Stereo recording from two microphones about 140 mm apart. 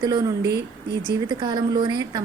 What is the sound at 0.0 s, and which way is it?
A woman's voice, 30° right (ahead or behind).